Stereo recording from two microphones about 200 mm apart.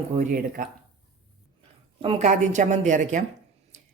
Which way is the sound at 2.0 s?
30° right (ahead or behind).